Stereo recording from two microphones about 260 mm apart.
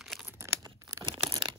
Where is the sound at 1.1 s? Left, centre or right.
Centre.